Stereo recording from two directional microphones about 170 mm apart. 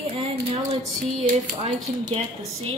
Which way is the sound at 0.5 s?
35° right (ahead or behind).